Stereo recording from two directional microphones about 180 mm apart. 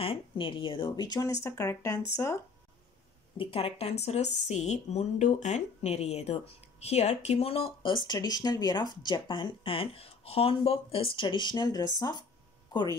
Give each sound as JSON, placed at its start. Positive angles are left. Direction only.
{"t": 0.0, "sound": "speech", "side_deg": 30}
{"t": 3.3, "sound": "speech", "side_deg": 30}